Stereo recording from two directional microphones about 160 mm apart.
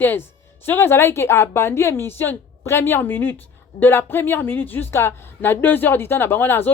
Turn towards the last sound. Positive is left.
turn(degrees=15)  # may be behind; listen again after turning